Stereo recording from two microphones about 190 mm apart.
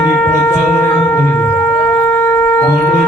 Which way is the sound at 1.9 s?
10° left (ahead or behind).